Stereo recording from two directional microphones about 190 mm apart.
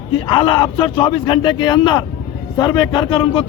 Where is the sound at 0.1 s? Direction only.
25° left (ahead or behind).